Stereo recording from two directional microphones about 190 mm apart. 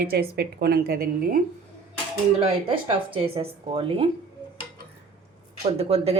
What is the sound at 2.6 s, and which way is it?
Speech, 30° right (ahead or behind).